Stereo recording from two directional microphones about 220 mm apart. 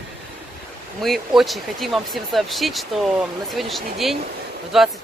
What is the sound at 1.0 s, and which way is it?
Speech, centre (ahead or behind).